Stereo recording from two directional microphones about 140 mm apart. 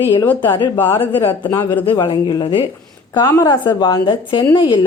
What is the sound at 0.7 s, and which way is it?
Speech, 15° left (ahead or behind).